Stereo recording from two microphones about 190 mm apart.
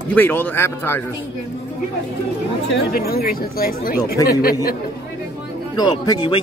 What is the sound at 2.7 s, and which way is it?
Speech, 55° left (ahead or behind).